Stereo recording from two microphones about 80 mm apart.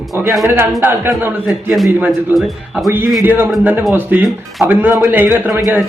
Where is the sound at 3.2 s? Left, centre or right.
Right.